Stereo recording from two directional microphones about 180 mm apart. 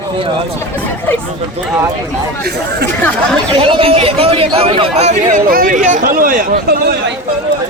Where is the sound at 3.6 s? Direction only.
30° right (ahead or behind).